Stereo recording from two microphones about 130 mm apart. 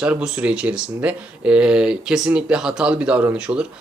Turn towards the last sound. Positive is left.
turn(degrees=-5)  # may be behind; listen again after turning